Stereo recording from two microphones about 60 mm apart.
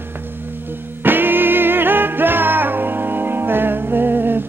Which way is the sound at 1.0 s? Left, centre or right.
Right.